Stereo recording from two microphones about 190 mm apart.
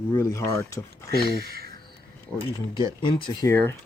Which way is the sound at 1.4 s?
55° right (ahead or behind).